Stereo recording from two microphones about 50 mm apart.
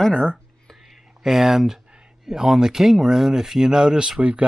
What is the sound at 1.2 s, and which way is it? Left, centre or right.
Speech, centre.